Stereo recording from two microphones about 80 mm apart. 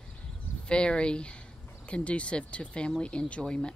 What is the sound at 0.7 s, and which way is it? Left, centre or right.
Speech, centre.